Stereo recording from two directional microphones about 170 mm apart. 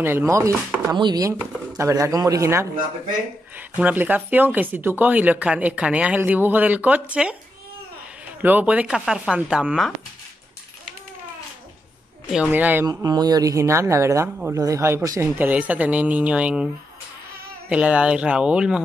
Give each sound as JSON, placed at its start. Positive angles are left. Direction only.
{"t": 0.0, "sound": "speech", "side_deg": -15}
{"t": 8.4, "sound": "speech", "side_deg": -10}
{"t": 12.3, "sound": "speech", "side_deg": -5}
{"t": 12.8, "sound": "speech", "side_deg": -20}
{"t": 17.6, "sound": "speech", "side_deg": -5}